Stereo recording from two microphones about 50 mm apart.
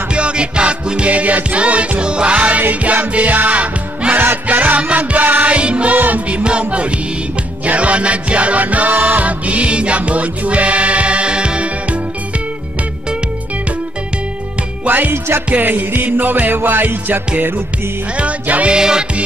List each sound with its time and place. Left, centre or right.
0.1 s music: right
14.9 s music: right
18.1 s music: right
18.8 s music: centre